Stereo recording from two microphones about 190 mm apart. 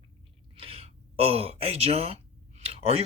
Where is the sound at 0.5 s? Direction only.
30° right (ahead or behind).